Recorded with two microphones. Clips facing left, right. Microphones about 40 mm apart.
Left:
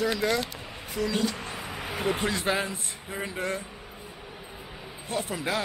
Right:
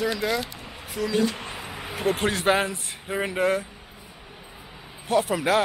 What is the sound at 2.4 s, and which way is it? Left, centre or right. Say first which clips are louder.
Speech: right 8 dB; right.